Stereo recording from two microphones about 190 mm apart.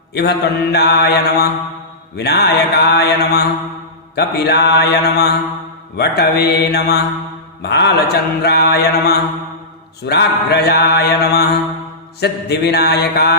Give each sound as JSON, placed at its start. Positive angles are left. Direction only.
{"t": 0.1, "sound": "mantra", "side_deg": 60}